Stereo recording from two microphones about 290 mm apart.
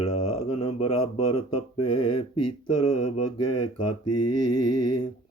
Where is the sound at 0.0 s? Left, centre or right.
Centre.